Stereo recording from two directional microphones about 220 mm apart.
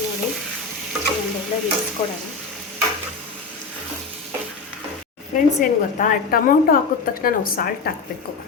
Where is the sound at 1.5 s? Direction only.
30° left (ahead or behind).